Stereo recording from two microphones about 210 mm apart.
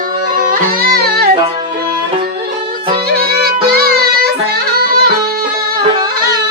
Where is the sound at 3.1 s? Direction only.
50° right (ahead or behind).